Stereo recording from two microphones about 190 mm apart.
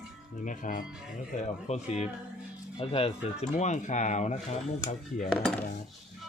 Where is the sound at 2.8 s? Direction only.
30° left (ahead or behind).